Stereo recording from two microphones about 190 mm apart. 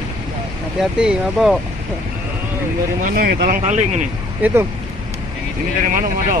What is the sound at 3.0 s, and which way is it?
Speech, 45° right (ahead or behind).